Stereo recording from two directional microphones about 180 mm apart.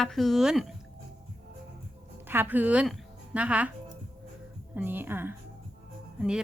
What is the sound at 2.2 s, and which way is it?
A woman's voice, 10° right (ahead or behind).